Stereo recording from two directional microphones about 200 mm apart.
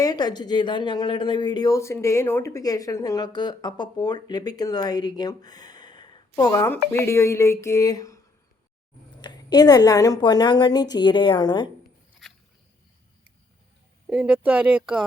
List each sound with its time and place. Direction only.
0.0 s a woman's voice: 20° left (ahead or behind)
9.2 s a woman's voice: 20° left (ahead or behind)
12.2 s a sound: centre (ahead or behind)
14.1 s speech: 5° right (ahead or behind)